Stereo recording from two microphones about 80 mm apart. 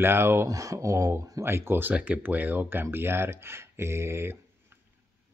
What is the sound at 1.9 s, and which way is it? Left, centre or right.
Speech, centre.